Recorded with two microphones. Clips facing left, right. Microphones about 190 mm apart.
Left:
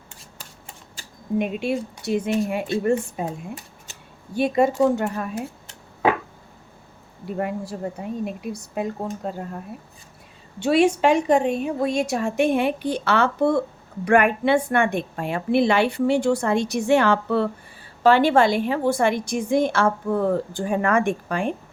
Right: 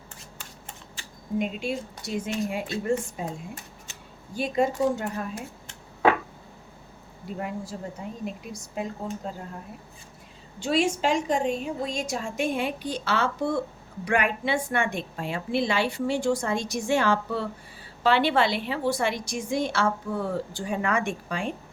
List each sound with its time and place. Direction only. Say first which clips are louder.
1.4 s a woman's voice: left 5 dB; 65° left (ahead or behind)
4.4 s a woman's voice: left 6 dB; 65° left (ahead or behind)
7.3 s a woman's voice: left 6 dB; 60° left (ahead or behind)
10.6 s a woman's voice: left 7 dB; 65° left (ahead or behind)
18.0 s a woman's voice: left 6 dB; 45° left (ahead or behind)